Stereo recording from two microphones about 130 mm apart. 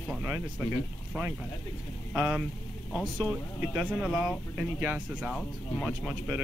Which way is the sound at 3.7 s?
5° right (ahead or behind).